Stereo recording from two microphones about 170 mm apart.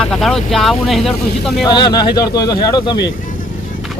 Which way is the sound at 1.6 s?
25° left (ahead or behind).